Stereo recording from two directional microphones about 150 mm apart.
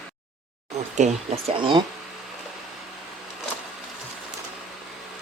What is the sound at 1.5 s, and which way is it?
Speech, 35° right (ahead or behind).